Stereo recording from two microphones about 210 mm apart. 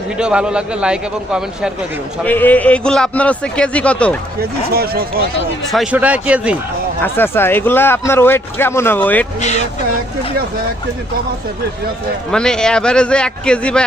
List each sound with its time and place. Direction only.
0.2 s a man's voice: 5° right (ahead or behind)
2.2 s a man's voice: 10° left (ahead or behind)
4.4 s speech: 45° right (ahead or behind)
5.7 s a man's voice: 5° right (ahead or behind)
7.0 s speech: 10° left (ahead or behind)
9.4 s speech: 35° left (ahead or behind)
12.3 s a man's voice: 5° left (ahead or behind)